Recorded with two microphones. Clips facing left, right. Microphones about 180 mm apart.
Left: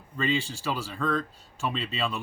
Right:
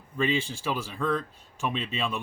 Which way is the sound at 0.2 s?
15° right (ahead or behind).